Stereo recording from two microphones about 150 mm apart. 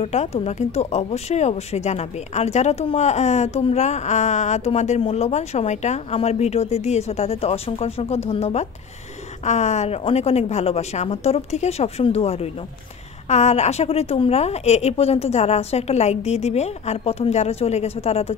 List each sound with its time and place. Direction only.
0.0 s speech: 45° left (ahead or behind)